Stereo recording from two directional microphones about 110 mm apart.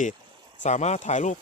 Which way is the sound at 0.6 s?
90° left.